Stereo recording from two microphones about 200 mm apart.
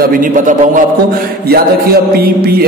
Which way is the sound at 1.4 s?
50° right (ahead or behind).